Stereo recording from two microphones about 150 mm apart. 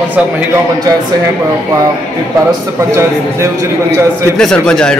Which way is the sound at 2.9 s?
20° right (ahead or behind).